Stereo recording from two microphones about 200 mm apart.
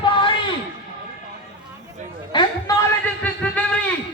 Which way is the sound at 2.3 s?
20° left (ahead or behind).